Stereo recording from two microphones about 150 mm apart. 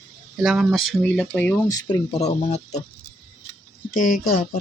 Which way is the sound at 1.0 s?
10° left (ahead or behind).